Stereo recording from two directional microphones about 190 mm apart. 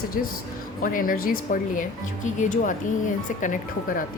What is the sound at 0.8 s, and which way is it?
Speech, 45° left (ahead or behind).